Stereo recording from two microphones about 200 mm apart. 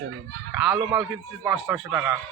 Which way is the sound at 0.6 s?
Centre (ahead or behind).